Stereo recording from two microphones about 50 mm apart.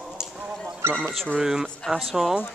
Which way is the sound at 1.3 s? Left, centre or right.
Centre.